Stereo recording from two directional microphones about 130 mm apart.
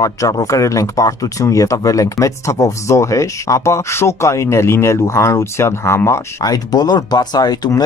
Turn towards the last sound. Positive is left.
turn(degrees=30)  # may be behind; listen again after turning